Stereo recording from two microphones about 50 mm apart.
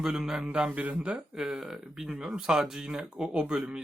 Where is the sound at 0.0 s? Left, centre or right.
Centre.